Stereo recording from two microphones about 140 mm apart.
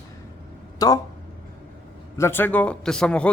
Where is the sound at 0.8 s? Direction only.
30° left (ahead or behind).